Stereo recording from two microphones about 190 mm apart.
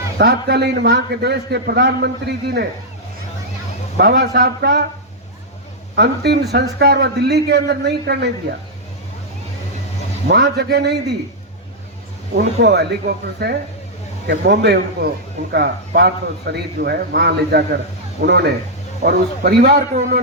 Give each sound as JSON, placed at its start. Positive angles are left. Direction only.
{"t": 0.2, "sound": "a man's voice", "side_deg": -60}
{"t": 3.9, "sound": "a man's voice", "side_deg": -60}
{"t": 6.0, "sound": "a man's voice", "side_deg": -60}
{"t": 10.2, "sound": "a man's voice", "side_deg": -60}
{"t": 12.5, "sound": "a man's voice", "side_deg": -60}